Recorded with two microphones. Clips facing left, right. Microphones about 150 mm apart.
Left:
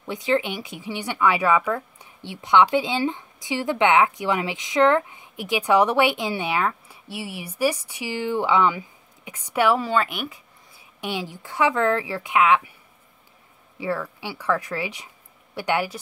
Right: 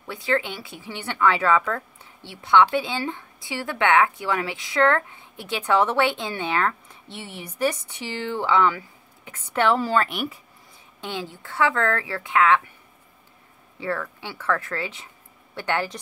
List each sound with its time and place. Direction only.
0.0 s speech: 20° left (ahead or behind); by 10.4 s centre (ahead or behind)
11.0 s speech: 15° left (ahead or behind)
13.7 s speech: 10° left (ahead or behind)